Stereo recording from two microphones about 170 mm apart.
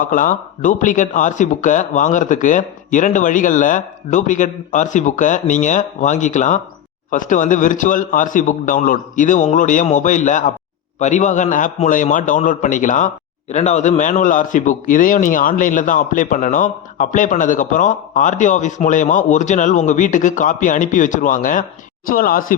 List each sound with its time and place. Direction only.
0.0 s a man's voice: 50° left (ahead or behind)